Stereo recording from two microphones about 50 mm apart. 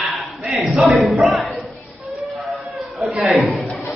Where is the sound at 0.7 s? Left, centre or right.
Centre.